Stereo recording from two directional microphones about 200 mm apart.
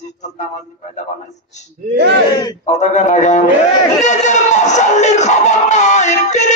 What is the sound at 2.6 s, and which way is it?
Speech, 35° left (ahead or behind).